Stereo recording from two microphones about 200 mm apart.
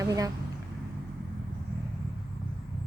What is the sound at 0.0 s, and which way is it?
Speech, 15° right (ahead or behind).